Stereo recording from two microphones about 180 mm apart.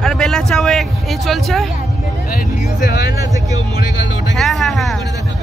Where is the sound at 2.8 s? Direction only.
60° left (ahead or behind).